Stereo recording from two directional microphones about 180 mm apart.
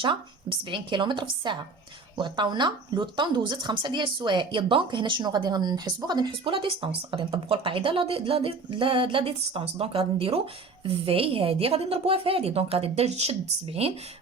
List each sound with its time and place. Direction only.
0.0 s speech: 25° right (ahead or behind)